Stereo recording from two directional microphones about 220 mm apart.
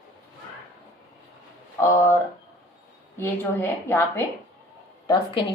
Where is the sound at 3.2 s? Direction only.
10° left (ahead or behind).